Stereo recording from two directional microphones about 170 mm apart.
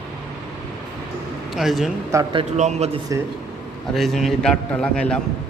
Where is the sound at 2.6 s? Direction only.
40° right (ahead or behind).